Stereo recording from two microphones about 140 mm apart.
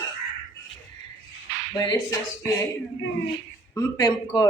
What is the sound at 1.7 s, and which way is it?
Speech, 30° left (ahead or behind).